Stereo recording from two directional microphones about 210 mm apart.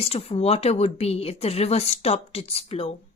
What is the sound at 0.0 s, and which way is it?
A woman's voice, 30° left (ahead or behind).